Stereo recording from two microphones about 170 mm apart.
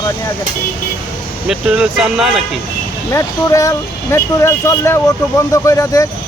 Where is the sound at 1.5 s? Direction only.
5° right (ahead or behind).